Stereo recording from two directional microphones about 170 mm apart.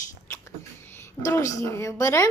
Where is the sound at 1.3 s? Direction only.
15° left (ahead or behind).